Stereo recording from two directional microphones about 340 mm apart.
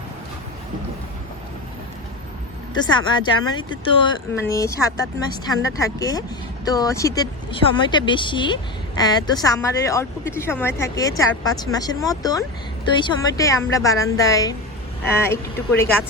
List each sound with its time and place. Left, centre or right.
2.7 s speech: centre